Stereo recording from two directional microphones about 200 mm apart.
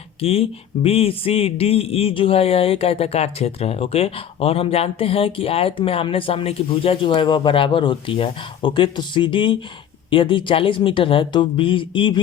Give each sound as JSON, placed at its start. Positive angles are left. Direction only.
{"t": 0.2, "sound": "speech", "side_deg": 30}